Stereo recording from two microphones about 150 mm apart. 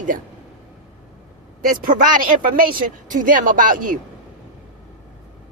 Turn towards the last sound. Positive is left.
turn(degrees=-65)  # may be behind; listen again after turning